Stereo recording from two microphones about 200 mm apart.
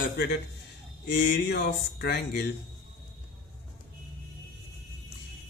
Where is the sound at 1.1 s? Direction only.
55° left (ahead or behind).